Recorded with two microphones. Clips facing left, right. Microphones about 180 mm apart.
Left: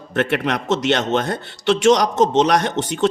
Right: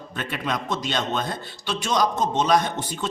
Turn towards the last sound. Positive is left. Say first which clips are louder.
# left 3 dB
turn(degrees=80)